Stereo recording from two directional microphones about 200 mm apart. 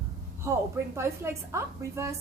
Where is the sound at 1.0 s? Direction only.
15° right (ahead or behind).